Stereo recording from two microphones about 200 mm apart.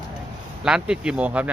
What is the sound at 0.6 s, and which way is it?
Speech, 5° right (ahead or behind).